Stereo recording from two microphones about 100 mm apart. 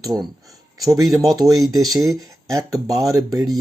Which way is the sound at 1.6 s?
Centre (ahead or behind).